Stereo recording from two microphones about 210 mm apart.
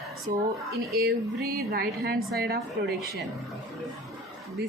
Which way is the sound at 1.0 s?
45° right (ahead or behind).